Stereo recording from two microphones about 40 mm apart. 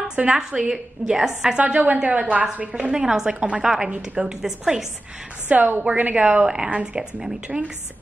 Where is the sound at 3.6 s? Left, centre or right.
Centre.